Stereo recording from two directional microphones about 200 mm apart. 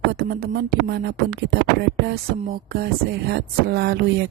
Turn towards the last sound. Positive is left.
turn(degrees=-55)  # may be behind; listen again after turning